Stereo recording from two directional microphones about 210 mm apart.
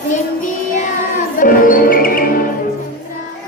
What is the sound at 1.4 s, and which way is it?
Music, 40° left (ahead or behind).